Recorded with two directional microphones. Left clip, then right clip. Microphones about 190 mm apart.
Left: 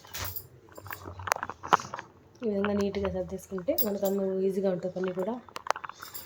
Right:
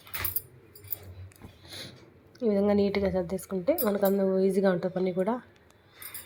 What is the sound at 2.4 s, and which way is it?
A woman's voice, 20° right (ahead or behind).